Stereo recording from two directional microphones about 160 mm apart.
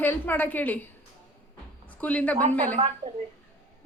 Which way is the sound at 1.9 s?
10° left (ahead or behind).